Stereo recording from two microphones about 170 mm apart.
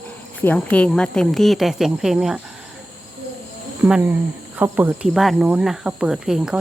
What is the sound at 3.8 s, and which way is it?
Speech, 10° right (ahead or behind).